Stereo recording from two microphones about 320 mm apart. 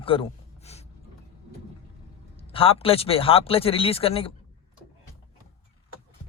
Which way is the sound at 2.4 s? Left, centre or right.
Centre.